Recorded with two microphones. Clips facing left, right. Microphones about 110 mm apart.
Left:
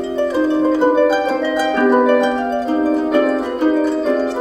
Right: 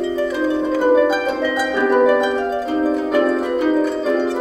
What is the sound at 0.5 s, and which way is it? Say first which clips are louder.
Harp: even; centre (ahead or behind).